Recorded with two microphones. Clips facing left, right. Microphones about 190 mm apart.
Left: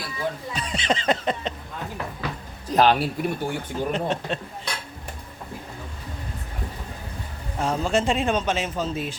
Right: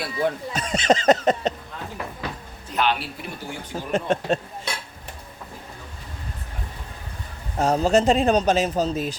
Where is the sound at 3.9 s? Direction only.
45° right (ahead or behind).